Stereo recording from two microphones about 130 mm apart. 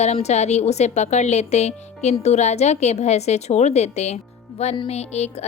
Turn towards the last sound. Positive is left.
turn(degrees=55)  # may be behind; listen again after turning